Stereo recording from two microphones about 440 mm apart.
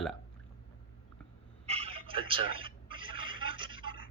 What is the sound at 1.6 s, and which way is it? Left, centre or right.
Telephone, centre.